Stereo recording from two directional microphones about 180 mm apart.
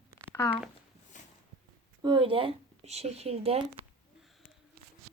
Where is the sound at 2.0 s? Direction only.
30° right (ahead or behind).